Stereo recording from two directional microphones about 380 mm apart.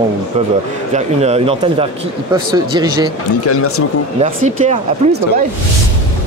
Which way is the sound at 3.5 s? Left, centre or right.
Left.